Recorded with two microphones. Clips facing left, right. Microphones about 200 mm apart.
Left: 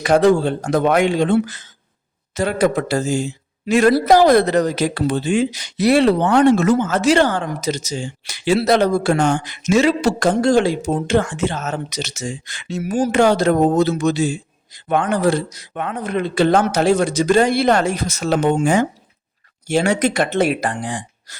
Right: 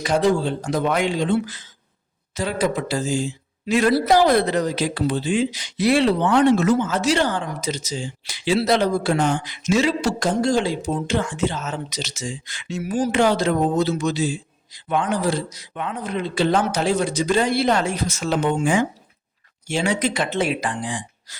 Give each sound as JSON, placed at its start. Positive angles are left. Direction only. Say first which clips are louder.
{"t": 0.0, "sound": "speech", "louder": "left 5 dB", "side_deg": 60}
{"t": 2.3, "sound": "speech", "louder": "left 5 dB", "side_deg": 65}
{"t": 3.7, "sound": "speech", "louder": "left 4 dB", "side_deg": 45}
{"t": 4.6, "sound": "speech", "louder": "left 3 dB", "side_deg": 70}
{"t": 5.0, "sound": "speech", "louder": "left 3 dB", "side_deg": 50}
{"t": 7.9, "sound": "speech", "louder": "left 3 dB", "side_deg": 70}
{"t": 9.1, "sound": "speech", "louder": "left 3 dB", "side_deg": 70}
{"t": 9.5, "sound": "speech", "louder": "left 4 dB", "side_deg": 55}
{"t": 10.9, "sound": "speech", "louder": "left 5 dB", "side_deg": 50}
{"t": 11.7, "sound": "speech", "louder": "left 4 dB", "side_deg": 65}
{"t": 12.6, "sound": "speech", "louder": "left 3 dB", "side_deg": 40}
{"t": 17.8, "sound": "speech", "louder": "left 3 dB", "side_deg": 45}
{"t": 20.8, "sound": "speech", "louder": "left 2 dB", "side_deg": 60}